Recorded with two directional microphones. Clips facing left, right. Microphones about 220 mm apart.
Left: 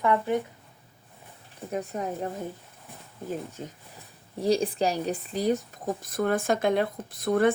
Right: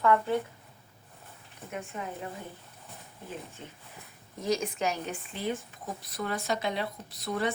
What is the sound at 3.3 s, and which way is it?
Speech, 40° left (ahead or behind).